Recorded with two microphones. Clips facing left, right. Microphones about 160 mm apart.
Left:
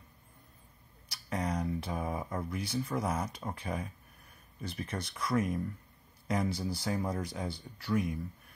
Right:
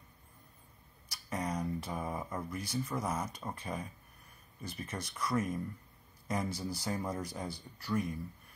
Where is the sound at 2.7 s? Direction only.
10° left (ahead or behind).